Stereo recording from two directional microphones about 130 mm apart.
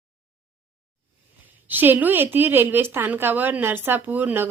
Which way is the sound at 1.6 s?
15° right (ahead or behind).